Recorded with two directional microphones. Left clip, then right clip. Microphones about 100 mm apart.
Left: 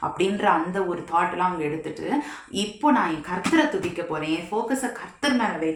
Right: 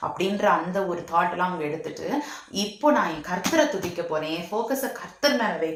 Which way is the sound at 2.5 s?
30° left (ahead or behind).